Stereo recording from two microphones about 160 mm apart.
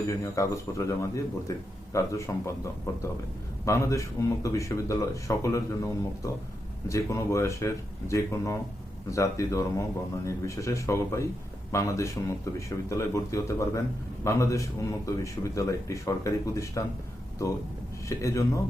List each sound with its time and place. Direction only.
0.3 s a man's voice: 20° left (ahead or behind)
18.1 s a man's voice: 20° left (ahead or behind)